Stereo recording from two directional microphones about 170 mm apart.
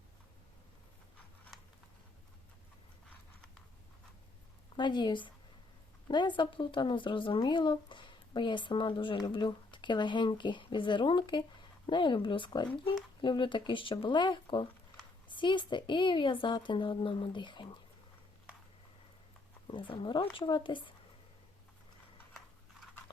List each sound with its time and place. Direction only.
4.8 s speech: 25° left (ahead or behind)
19.6 s speech: 30° left (ahead or behind)